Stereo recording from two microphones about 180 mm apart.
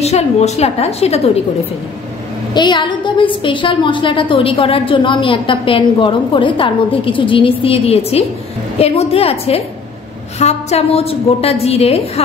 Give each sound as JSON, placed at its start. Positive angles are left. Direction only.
{"t": 0.0, "sound": "a woman's voice", "side_deg": 35}
{"t": 2.5, "sound": "a woman's voice", "side_deg": 25}